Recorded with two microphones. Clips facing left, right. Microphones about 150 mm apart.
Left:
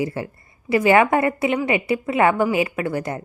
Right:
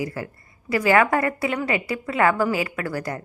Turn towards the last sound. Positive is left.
turn(degrees=25)  # may be behind; listen again after turning